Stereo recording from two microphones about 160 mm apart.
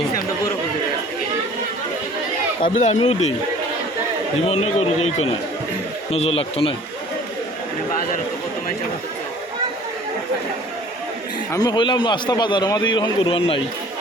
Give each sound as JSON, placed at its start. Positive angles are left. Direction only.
{"t": 2.7, "sound": "a man's voice", "side_deg": 45}
{"t": 4.4, "sound": "a man's voice", "side_deg": 40}
{"t": 6.1, "sound": "a man's voice", "side_deg": 40}
{"t": 11.5, "sound": "a man's voice", "side_deg": 25}